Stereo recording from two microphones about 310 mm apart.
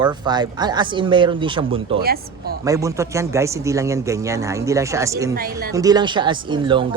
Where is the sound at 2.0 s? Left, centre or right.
Right.